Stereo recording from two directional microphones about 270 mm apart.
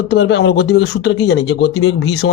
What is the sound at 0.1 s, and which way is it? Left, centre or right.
Speech, left.